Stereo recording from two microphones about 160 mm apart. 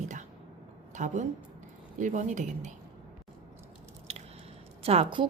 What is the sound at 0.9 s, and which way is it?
A woman's voice, 50° right (ahead or behind).